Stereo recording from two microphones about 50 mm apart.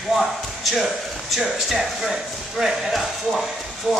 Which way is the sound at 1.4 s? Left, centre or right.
Centre.